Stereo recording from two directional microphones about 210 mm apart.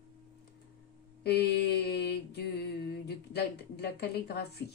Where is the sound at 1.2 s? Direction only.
50° left (ahead or behind).